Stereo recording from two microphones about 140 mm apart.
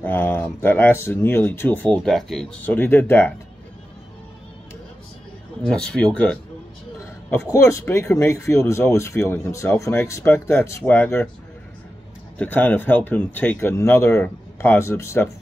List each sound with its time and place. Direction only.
0.0 s speech: 15° left (ahead or behind)
2.0 s speech: centre (ahead or behind)
2.6 s speech: 15° left (ahead or behind)
5.7 s speech: 5° left (ahead or behind)
7.5 s speech: 20° left (ahead or behind)
12.4 s speech: 15° left (ahead or behind)